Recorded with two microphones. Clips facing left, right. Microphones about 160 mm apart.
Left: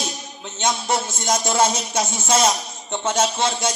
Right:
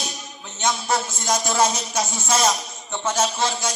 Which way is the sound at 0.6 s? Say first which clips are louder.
Left 1 dB; 25° left (ahead or behind).